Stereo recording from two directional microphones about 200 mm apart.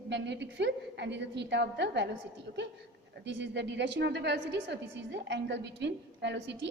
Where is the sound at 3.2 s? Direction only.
60° right (ahead or behind).